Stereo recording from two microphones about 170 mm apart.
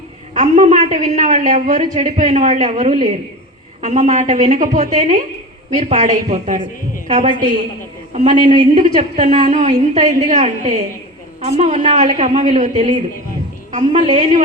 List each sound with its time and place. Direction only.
0.3 s a woman's voice: 45° right (ahead or behind)
8.4 s speech: 30° right (ahead or behind)
8.8 s a woman's voice: 45° right (ahead or behind)
12.7 s a woman's voice: 30° right (ahead or behind)
13.7 s a woman's voice: 45° right (ahead or behind)